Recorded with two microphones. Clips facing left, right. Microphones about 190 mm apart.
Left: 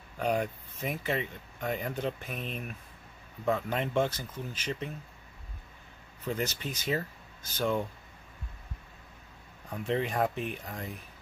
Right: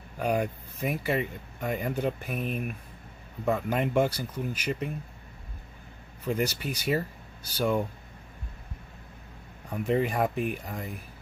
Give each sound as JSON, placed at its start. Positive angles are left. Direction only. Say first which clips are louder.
{"t": 0.2, "sound": "speech", "louder": "right 2 dB", "side_deg": -10}
{"t": 6.2, "sound": "speech", "louder": "right 4 dB", "side_deg": -10}
{"t": 9.7, "sound": "speech", "louder": "right 4 dB", "side_deg": -10}